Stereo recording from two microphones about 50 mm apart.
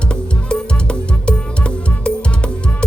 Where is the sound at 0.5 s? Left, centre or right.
Centre.